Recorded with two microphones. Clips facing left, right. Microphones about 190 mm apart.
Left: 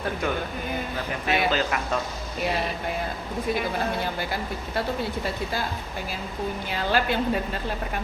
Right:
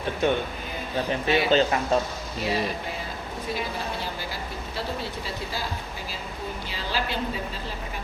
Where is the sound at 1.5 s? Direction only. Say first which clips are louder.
Right 4 dB; 30° right (ahead or behind).